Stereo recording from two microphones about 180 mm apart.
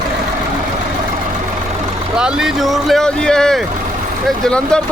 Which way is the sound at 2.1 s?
5° right (ahead or behind).